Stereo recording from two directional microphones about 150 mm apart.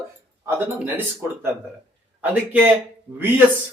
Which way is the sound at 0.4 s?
15° right (ahead or behind).